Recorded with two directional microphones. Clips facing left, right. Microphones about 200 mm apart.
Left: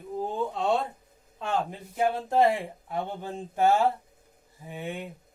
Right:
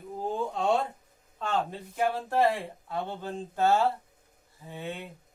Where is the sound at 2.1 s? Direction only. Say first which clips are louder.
Left 3 dB; 20° left (ahead or behind).